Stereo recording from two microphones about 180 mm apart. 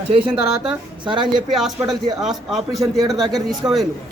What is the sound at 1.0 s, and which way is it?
Speech, 25° right (ahead or behind).